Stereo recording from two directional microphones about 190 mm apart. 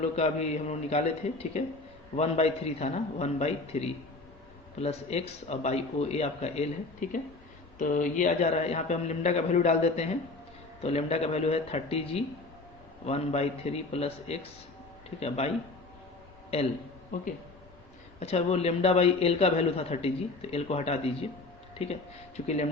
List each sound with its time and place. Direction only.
0.0 s a man's voice: 35° left (ahead or behind)
18.2 s a man's voice: 35° left (ahead or behind)